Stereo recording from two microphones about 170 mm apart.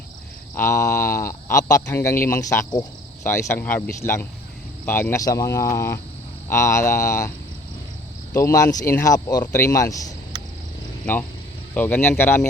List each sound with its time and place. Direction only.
0.5 s speech: 15° left (ahead or behind)
8.3 s speech: 15° left (ahead or behind)
10.3 s a sound: 20° right (ahead or behind)
11.0 s speech: 10° left (ahead or behind)